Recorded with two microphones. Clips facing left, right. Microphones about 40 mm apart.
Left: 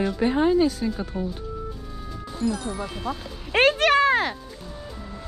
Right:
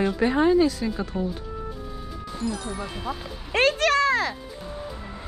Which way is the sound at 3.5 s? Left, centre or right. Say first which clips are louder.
Left 2 dB; left.